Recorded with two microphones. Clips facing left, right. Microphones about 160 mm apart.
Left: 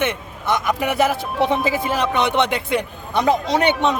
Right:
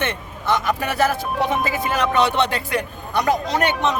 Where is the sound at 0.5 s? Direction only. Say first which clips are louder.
Left 2 dB; 15° left (ahead or behind).